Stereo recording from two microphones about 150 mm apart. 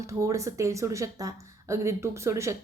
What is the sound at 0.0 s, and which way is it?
A woman's voice, 20° right (ahead or behind).